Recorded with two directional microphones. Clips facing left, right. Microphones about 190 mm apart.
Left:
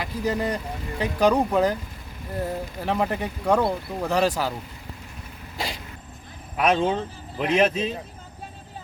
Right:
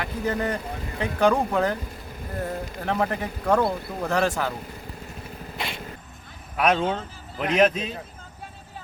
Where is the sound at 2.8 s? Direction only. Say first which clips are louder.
Left 1 dB; 5° left (ahead or behind).